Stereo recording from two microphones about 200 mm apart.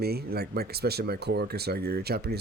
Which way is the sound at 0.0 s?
50° right (ahead or behind).